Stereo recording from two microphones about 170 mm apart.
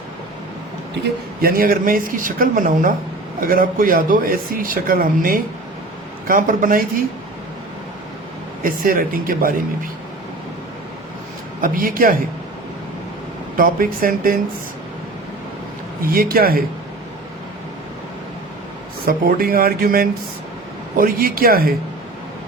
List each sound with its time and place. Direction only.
1.4 s speech: 60° right (ahead or behind)
8.6 s speech: 55° right (ahead or behind)
11.6 s speech: 55° right (ahead or behind)
13.6 s speech: 55° right (ahead or behind)
16.0 s speech: 60° right (ahead or behind)
19.0 s speech: 60° right (ahead or behind)